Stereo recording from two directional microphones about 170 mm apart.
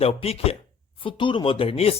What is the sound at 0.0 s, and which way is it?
Speech, 35° left (ahead or behind).